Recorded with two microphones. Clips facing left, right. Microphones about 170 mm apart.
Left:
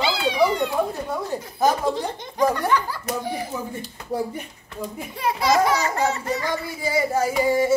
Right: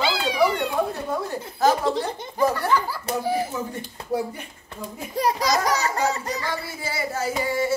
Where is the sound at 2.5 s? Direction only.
5° right (ahead or behind).